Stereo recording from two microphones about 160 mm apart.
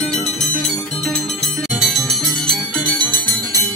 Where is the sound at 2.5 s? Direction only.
5° left (ahead or behind).